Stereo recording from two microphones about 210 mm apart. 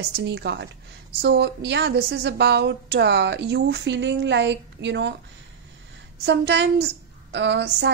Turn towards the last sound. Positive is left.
turn(degrees=-55)  # may be behind; listen again after turning